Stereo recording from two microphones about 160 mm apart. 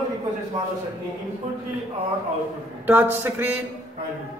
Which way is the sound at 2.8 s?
10° right (ahead or behind).